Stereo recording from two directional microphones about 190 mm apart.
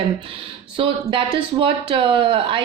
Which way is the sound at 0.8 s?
30° right (ahead or behind).